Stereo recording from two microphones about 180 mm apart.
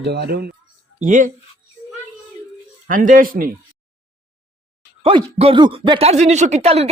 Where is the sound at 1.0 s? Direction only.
45° right (ahead or behind).